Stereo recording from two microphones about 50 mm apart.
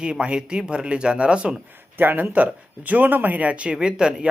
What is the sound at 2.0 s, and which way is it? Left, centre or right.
Speech, right.